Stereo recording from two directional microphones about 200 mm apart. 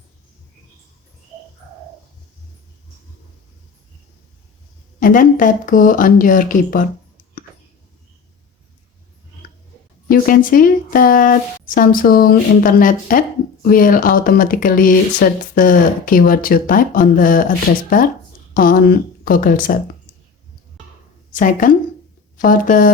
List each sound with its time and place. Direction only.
4.9 s speech: 40° left (ahead or behind)
10.1 s speech: 45° left (ahead or behind)
21.3 s speech: 40° left (ahead or behind)